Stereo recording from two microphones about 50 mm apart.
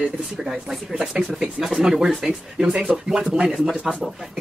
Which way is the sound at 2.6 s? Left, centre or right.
Right.